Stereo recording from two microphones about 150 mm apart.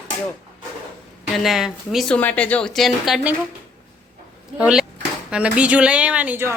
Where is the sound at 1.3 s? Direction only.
Centre (ahead or behind).